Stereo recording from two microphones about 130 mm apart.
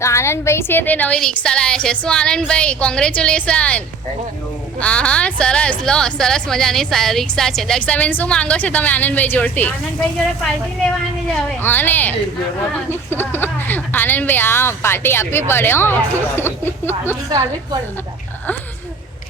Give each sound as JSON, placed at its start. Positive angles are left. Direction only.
{"t": 0.0, "sound": "a woman's voice", "side_deg": 20}
{"t": 11.6, "sound": "a woman's voice", "side_deg": 15}